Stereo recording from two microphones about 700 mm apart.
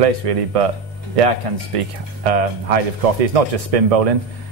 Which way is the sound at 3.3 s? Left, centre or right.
Right.